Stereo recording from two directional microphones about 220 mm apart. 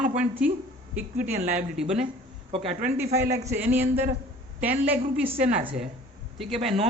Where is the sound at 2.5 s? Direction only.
25° right (ahead or behind).